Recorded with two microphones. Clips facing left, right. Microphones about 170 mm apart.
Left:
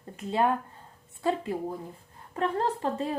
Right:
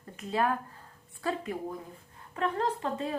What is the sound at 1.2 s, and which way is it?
A woman's voice, 25° left (ahead or behind).